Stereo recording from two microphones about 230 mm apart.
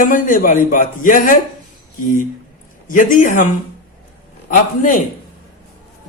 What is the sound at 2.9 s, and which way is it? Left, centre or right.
Speech, left.